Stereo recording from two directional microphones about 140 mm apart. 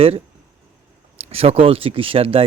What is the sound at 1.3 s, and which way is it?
Speech, 45° right (ahead or behind).